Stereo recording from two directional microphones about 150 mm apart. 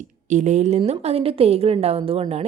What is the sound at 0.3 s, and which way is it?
A woman's voice, 50° right (ahead or behind).